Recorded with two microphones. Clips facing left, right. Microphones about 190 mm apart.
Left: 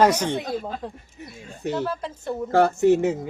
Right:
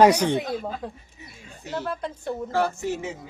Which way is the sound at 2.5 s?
60° left (ahead or behind).